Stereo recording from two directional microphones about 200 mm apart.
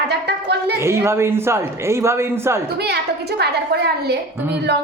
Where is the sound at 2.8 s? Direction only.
55° right (ahead or behind).